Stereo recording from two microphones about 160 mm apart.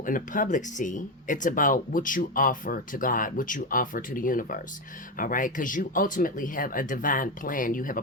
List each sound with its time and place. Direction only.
0.0 s speech: 55° left (ahead or behind)